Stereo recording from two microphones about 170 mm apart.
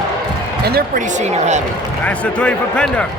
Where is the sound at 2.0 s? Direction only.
5° left (ahead or behind).